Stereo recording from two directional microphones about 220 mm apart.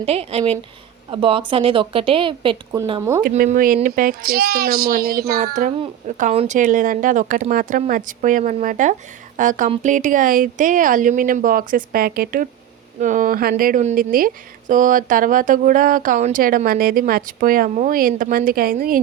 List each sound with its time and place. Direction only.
0.0 s a woman's voice: 25° right (ahead or behind)
3.0 s speech: 10° right (ahead or behind)
3.2 s a child's voice: 40° right (ahead or behind)